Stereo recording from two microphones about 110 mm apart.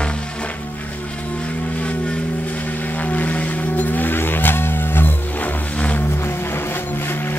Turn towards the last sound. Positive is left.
turn(degrees=20)  # may be behind; listen again after turning